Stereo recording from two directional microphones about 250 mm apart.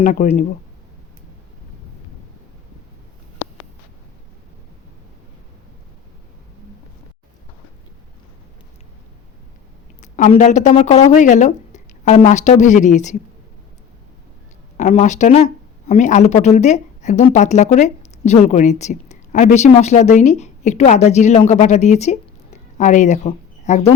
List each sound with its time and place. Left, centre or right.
0.0 s speech: left
10.0 s speech: left
14.8 s a woman's voice: left